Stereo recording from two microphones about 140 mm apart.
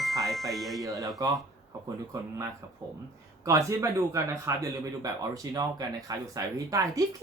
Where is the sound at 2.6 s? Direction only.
25° right (ahead or behind).